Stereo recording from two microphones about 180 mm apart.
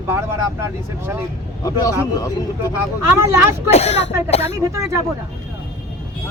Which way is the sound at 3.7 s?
35° left (ahead or behind).